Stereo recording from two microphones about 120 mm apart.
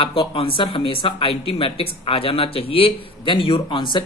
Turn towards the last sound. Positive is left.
turn(degrees=40)  # may be behind; listen again after turning